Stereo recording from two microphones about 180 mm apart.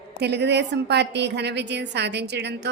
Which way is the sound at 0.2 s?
70° right (ahead or behind).